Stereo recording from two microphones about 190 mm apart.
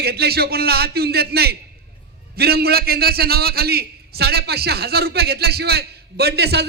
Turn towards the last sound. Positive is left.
turn(degrees=-60)  # may be behind; listen again after turning